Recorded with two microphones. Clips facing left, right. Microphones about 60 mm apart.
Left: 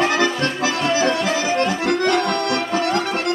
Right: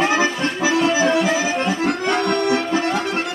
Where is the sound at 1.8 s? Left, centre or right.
Left.